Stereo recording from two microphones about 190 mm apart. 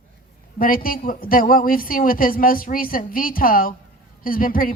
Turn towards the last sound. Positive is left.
turn(degrees=50)  # may be behind; listen again after turning